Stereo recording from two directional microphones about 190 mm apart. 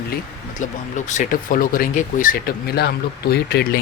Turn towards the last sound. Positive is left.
turn(degrees=55)  # may be behind; listen again after turning